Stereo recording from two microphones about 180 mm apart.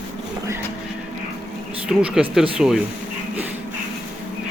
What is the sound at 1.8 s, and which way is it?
Speech, 5° right (ahead or behind).